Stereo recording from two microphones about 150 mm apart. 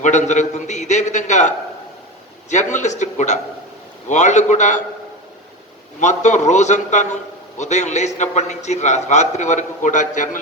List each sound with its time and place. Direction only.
0.0 s a man's voice: 50° left (ahead or behind)
6.0 s a man's voice: 55° left (ahead or behind)